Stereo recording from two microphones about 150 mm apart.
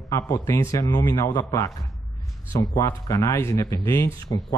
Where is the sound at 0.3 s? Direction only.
15° left (ahead or behind).